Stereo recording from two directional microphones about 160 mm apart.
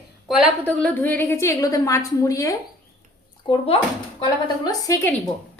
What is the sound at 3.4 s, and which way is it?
Speech, 35° left (ahead or behind).